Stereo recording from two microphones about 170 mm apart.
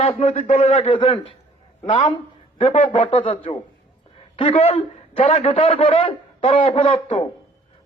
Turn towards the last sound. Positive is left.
turn(degrees=35)  # may be behind; listen again after turning